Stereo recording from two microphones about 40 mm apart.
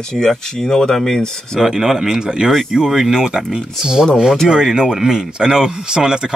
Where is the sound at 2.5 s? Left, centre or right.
Centre.